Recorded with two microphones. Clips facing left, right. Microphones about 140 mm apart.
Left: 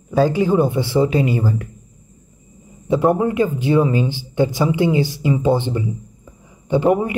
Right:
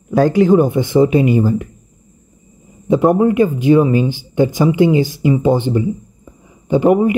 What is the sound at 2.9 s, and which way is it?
Speech, 15° right (ahead or behind).